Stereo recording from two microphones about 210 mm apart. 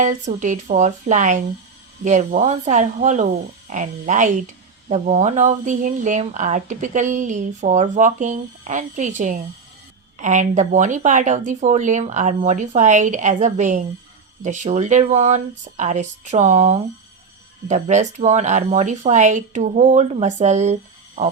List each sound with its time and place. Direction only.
0.0 s speech: 35° right (ahead or behind)